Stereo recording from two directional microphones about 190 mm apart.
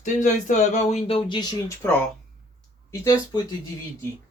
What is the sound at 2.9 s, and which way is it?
Speech, 20° left (ahead or behind).